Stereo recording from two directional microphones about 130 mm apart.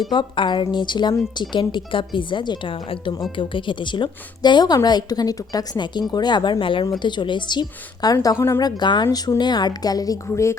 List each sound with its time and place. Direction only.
0.1 s speech: 35° left (ahead or behind)